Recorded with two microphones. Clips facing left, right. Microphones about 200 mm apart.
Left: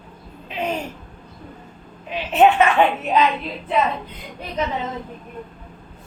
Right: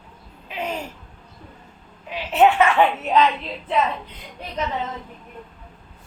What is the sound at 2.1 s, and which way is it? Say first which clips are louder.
A child's voice: left 1 dB; 20° left (ahead or behind).